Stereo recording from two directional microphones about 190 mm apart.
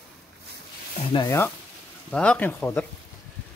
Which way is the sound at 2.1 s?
5° left (ahead or behind).